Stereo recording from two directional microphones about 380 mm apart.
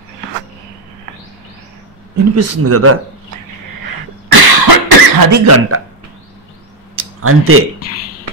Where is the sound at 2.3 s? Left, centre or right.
Right.